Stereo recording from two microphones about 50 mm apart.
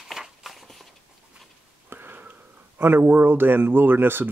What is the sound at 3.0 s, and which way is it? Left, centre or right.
Speech, right.